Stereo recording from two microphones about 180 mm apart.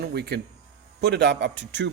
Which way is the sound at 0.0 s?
65° right (ahead or behind).